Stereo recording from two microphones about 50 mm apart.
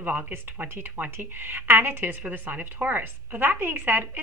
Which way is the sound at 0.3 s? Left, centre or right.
Right.